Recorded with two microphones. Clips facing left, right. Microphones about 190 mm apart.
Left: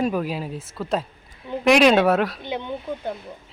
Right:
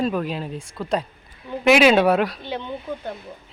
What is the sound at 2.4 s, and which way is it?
Speech, 15° left (ahead or behind).